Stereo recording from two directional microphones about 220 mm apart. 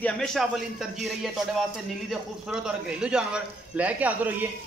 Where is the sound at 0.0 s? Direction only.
Centre (ahead or behind).